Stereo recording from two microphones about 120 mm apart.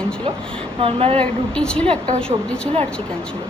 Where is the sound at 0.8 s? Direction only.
50° right (ahead or behind).